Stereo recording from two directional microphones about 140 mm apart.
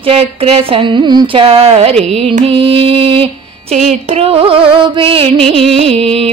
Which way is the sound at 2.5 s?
40° right (ahead or behind).